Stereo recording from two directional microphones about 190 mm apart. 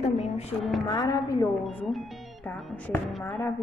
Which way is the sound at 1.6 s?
Centre (ahead or behind).